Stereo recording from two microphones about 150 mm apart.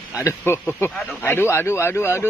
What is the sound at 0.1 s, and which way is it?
Speech, 20° left (ahead or behind).